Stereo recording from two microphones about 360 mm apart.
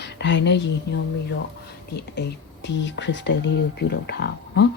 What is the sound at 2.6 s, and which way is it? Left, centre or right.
Speech, left.